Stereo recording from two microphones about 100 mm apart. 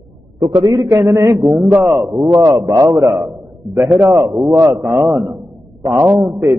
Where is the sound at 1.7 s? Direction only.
20° right (ahead or behind).